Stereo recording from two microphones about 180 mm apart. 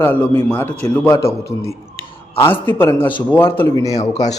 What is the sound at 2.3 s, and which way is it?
Speech, 10° left (ahead or behind).